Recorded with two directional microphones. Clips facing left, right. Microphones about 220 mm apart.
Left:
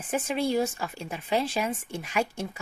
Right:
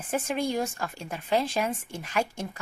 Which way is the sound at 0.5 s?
5° left (ahead or behind).